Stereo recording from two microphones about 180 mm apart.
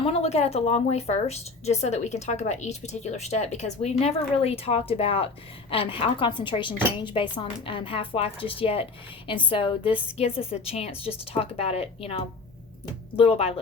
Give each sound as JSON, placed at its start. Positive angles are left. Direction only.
{"t": 0.0, "sound": "a woman's voice", "side_deg": 35}